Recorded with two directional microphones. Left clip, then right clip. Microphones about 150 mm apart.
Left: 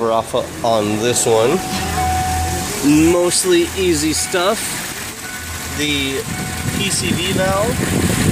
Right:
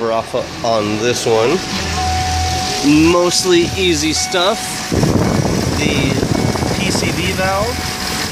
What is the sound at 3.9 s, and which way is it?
Speech, centre (ahead or behind).